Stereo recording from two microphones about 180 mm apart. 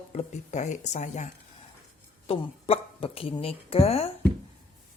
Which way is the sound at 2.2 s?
30° left (ahead or behind).